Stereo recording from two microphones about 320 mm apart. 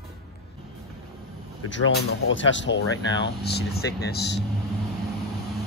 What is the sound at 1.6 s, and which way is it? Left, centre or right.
Speech, left.